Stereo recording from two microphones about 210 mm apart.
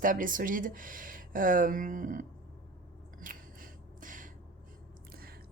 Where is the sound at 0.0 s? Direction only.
40° right (ahead or behind).